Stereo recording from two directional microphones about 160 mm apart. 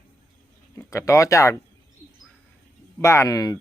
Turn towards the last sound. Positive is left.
turn(degrees=20)  # may be behind; listen again after turning